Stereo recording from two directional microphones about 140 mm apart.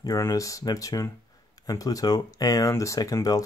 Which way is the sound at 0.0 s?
25° left (ahead or behind).